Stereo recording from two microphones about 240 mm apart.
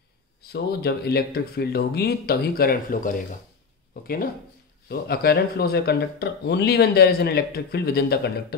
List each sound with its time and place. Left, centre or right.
0.4 s speech: left
4.8 s speech: left